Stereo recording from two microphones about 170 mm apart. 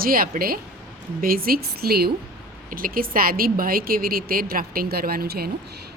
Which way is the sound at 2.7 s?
55° right (ahead or behind).